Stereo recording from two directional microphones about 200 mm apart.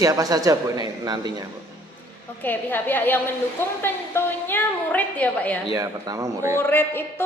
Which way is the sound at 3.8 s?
10° left (ahead or behind).